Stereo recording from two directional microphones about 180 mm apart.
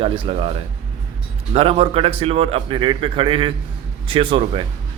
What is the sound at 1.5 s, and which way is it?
A man's voice, 30° right (ahead or behind).